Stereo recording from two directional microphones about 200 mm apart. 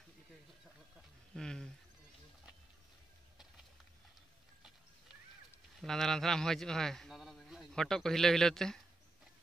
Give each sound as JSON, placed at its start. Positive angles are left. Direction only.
{"t": 1.3, "sound": "speech", "side_deg": 5}
{"t": 5.8, "sound": "a man's voice", "side_deg": 0}